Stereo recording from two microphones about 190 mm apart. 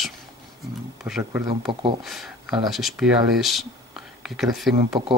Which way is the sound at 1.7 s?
25° right (ahead or behind).